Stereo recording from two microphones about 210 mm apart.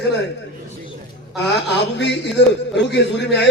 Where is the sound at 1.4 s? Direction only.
55° left (ahead or behind).